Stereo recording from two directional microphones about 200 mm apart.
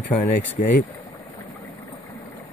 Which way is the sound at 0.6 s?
45° left (ahead or behind).